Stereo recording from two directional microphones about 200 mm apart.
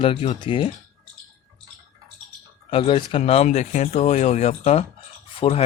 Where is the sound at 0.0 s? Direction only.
25° left (ahead or behind).